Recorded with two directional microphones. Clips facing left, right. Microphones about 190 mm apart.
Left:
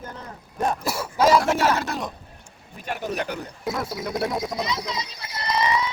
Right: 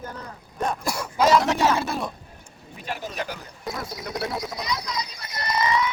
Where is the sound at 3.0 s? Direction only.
60° left (ahead or behind).